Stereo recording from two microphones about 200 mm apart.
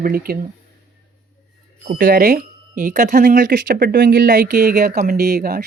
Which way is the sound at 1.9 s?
40° right (ahead or behind).